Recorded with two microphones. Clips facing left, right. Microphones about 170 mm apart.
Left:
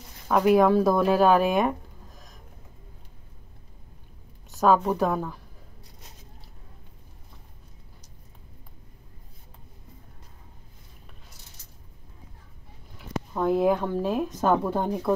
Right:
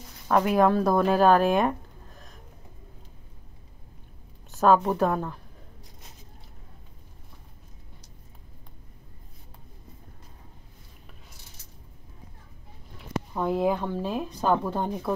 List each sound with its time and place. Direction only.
0.3 s speech: 5° left (ahead or behind)
4.5 s a woman's voice: centre (ahead or behind)
13.3 s a woman's voice: centre (ahead or behind)